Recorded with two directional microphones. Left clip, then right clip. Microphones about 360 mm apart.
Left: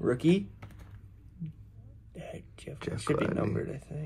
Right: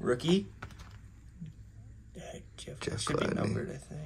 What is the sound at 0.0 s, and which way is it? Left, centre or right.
Speech, centre.